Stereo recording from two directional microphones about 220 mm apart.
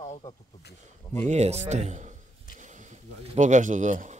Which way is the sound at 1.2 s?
30° right (ahead or behind).